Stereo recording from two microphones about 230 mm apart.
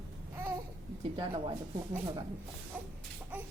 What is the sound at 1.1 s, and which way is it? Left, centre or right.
Speech, right.